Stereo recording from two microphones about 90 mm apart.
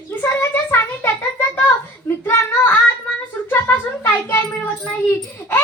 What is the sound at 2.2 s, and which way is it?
Child singing, 25° left (ahead or behind).